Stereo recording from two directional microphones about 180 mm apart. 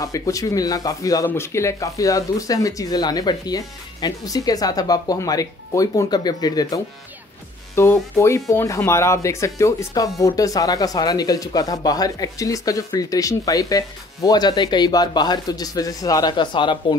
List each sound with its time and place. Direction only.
0.0 s speech: 20° left (ahead or behind)